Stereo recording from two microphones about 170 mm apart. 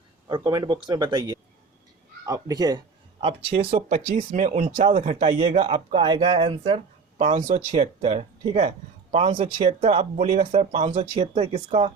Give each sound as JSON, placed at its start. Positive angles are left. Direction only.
{"t": 0.3, "sound": "speech", "side_deg": -25}
{"t": 3.8, "sound": "speech", "side_deg": -45}
{"t": 5.0, "sound": "speech", "side_deg": -35}